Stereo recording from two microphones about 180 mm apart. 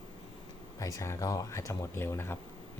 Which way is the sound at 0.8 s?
20° left (ahead or behind).